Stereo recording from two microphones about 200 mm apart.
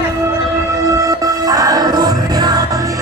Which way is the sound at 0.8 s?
15° right (ahead or behind).